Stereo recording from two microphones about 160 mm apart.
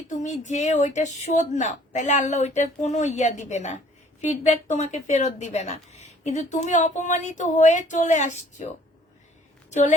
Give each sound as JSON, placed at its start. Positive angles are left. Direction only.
{"t": 0.1, "sound": "a woman's voice", "side_deg": 50}